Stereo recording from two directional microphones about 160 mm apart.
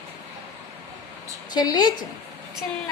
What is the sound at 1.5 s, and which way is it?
Speech, 25° left (ahead or behind).